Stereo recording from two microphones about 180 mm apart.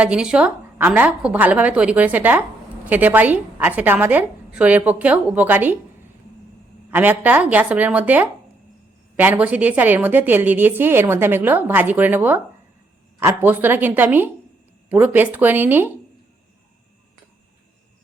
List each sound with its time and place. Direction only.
0.0 s a woman's voice: 5° right (ahead or behind)
6.9 s a woman's voice: 10° right (ahead or behind)